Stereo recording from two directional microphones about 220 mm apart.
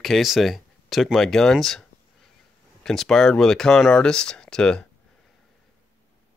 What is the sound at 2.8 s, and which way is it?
Speech, centre (ahead or behind).